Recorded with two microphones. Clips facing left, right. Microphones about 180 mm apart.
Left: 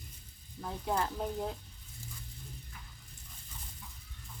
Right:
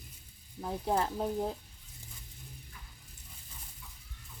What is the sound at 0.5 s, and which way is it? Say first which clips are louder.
Speech: right 3 dB; 30° right (ahead or behind).